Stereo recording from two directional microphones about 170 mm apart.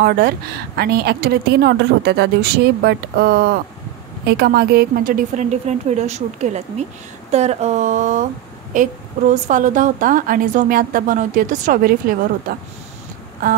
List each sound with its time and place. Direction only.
0.0 s a woman's voice: 65° right (ahead or behind); by 8.3 s 50° right (ahead or behind)
9.3 s a woman's voice: 50° right (ahead or behind)